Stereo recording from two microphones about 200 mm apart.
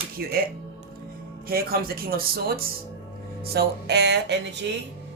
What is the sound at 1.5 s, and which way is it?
Speech, 50° right (ahead or behind).